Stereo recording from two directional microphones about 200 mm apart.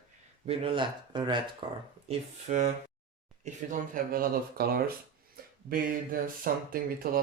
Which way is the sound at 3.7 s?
45° right (ahead or behind).